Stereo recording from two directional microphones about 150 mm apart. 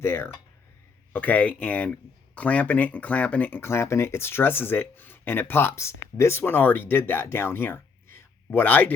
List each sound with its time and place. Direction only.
0.0 s speech: 15° left (ahead or behind)